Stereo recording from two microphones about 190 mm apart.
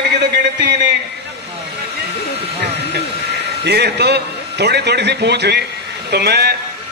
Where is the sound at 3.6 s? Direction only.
60° right (ahead or behind).